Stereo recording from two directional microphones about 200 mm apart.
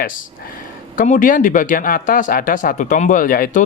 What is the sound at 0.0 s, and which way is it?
Speech, 45° left (ahead or behind).